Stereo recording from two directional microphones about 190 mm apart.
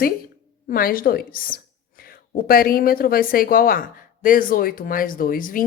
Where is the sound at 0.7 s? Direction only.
50° left (ahead or behind).